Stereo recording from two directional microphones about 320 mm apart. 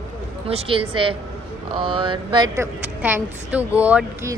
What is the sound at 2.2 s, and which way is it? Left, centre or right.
Speech, centre.